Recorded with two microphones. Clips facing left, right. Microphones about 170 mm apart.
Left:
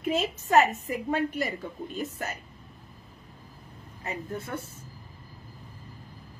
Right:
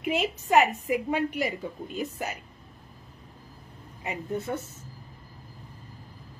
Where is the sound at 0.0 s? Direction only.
15° right (ahead or behind).